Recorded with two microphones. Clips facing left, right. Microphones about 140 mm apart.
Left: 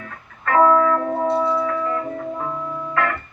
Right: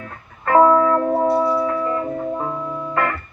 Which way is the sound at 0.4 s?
25° right (ahead or behind).